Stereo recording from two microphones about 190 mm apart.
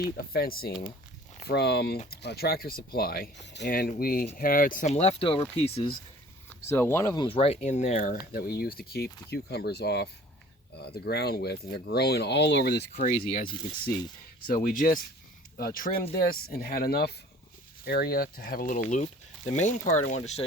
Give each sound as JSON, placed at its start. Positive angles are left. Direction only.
{"t": 0.0, "sound": "speech", "side_deg": 50}
{"t": 6.6, "sound": "speech", "side_deg": 15}
{"t": 14.4, "sound": "speech", "side_deg": 45}